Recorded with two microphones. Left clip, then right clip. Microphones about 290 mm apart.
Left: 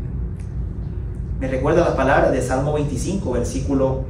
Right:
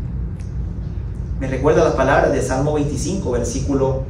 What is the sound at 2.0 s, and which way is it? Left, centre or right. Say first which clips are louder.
Speech: right 1 dB; centre.